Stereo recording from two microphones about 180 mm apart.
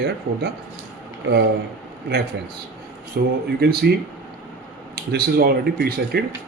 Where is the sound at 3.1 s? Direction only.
65° right (ahead or behind).